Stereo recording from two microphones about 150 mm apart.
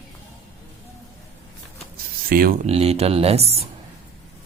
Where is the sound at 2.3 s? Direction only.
75° right (ahead or behind).